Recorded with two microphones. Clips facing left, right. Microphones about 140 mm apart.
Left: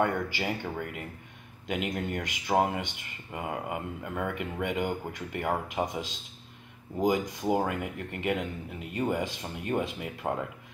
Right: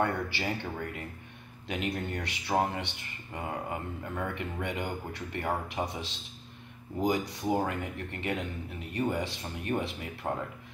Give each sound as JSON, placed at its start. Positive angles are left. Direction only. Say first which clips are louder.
{"t": 0.0, "sound": "speech", "louder": "left 2 dB", "side_deg": 15}